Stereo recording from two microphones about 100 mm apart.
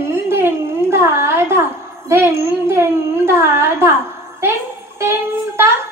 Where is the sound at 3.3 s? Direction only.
25° right (ahead or behind).